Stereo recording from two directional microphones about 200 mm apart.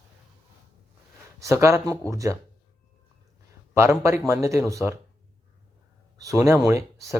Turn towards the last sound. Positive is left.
turn(degrees=-15)  # may be behind; listen again after turning